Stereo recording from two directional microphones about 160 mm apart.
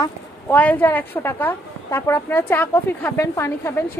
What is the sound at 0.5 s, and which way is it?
Speech, 10° left (ahead or behind).